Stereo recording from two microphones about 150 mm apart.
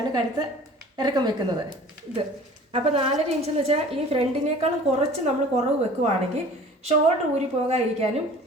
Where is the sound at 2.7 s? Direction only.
45° right (ahead or behind).